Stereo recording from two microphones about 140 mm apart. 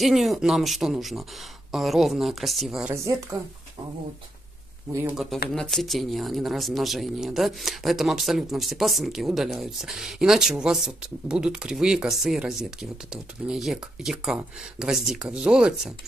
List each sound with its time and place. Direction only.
0.0 s speech: centre (ahead or behind)
2.9 s a woman's voice: 20° right (ahead or behind)
5.1 s speech: 5° right (ahead or behind)